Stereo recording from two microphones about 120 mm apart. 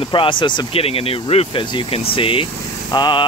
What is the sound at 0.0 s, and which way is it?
Speech, 45° left (ahead or behind).